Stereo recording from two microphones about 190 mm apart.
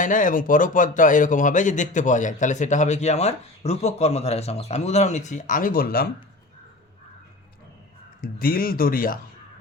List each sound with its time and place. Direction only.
0.0 s speech: 45° left (ahead or behind)
8.2 s speech: 50° left (ahead or behind)